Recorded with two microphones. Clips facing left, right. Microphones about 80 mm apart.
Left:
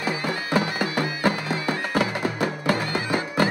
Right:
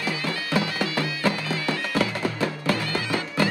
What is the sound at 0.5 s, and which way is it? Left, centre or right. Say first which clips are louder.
Bagpipes: left 2 dB; centre.